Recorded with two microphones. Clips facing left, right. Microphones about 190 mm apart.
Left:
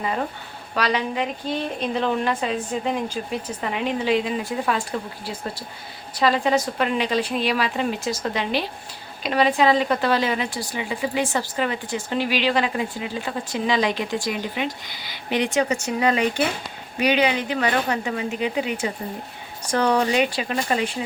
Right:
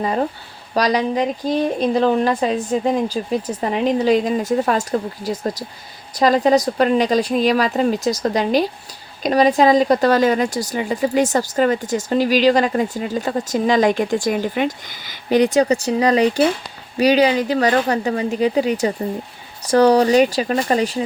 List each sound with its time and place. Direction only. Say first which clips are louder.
0.0 s speech: right 6 dB; 35° right (ahead or behind)